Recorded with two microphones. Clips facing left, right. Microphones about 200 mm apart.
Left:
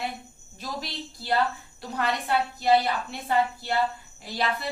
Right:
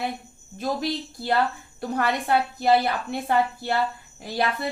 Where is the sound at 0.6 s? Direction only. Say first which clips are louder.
Right 9 dB; 50° right (ahead or behind).